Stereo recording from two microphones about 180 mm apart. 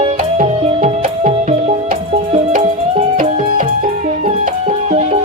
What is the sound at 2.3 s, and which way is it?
Music, 35° right (ahead or behind).